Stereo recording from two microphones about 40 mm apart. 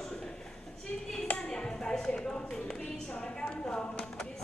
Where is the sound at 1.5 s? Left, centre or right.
Centre.